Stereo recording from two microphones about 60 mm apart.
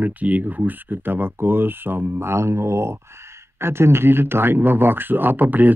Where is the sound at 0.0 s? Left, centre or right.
Right.